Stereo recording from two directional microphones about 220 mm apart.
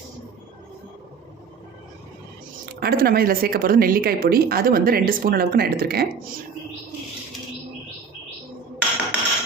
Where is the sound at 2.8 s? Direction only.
45° right (ahead or behind).